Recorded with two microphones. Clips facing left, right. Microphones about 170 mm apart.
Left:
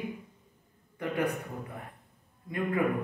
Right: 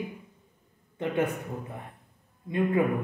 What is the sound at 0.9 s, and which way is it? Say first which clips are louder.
Speech: right 3 dB; 25° right (ahead or behind).